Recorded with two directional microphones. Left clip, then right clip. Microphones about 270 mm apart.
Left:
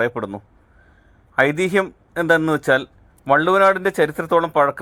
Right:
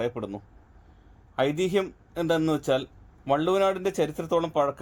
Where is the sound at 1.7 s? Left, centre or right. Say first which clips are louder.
Left 7 dB; centre.